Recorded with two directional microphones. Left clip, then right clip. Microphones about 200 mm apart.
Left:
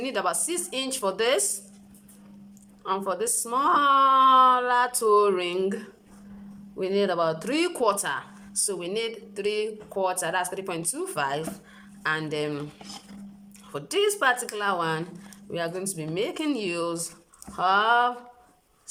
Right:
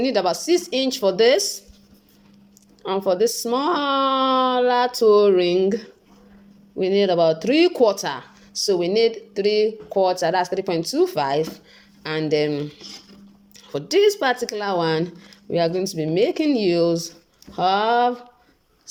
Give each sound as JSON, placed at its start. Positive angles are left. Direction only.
{"t": 0.0, "sound": "speech", "side_deg": -20}
{"t": 2.8, "sound": "speech", "side_deg": -20}
{"t": 13.7, "sound": "speech", "side_deg": -20}